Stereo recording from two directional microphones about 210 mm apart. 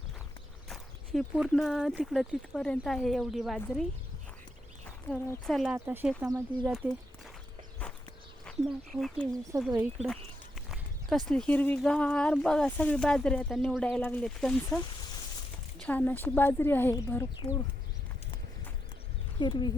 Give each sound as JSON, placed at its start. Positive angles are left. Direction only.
{"t": 0.7, "sound": "speech", "side_deg": 0}
{"t": 5.5, "sound": "speech", "side_deg": -5}
{"t": 6.7, "sound": "speech", "side_deg": 0}
{"t": 8.4, "sound": "speech", "side_deg": 0}
{"t": 11.3, "sound": "speech", "side_deg": 5}
{"t": 15.8, "sound": "speech", "side_deg": 5}
{"t": 19.4, "sound": "speech", "side_deg": 20}